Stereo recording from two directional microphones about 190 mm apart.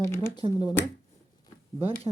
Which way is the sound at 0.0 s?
15° left (ahead or behind).